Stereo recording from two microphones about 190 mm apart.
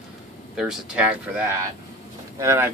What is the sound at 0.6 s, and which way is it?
Speech, 5° right (ahead or behind).